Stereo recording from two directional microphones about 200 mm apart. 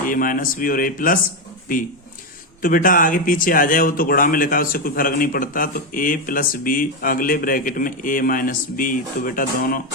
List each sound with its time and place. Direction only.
0.1 s speech: 45° left (ahead or behind)
2.6 s speech: 45° left (ahead or behind)